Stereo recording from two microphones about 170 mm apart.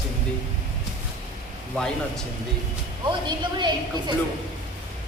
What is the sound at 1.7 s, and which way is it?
Speech, 5° left (ahead or behind).